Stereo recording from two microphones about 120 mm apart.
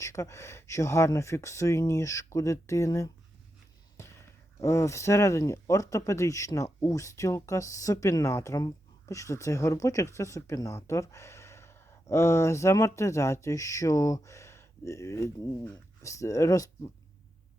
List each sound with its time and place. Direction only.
0.0 s speech: 25° left (ahead or behind)
4.6 s speech: 25° left (ahead or behind)